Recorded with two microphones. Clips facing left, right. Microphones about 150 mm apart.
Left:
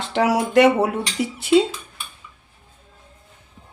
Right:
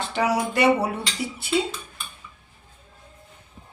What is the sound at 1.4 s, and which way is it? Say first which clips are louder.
Dishes: left 9 dB; 90° left.